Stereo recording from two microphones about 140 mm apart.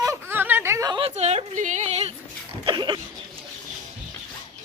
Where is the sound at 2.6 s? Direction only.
30° right (ahead or behind).